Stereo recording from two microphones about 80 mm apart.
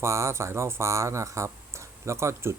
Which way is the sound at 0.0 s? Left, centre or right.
Right.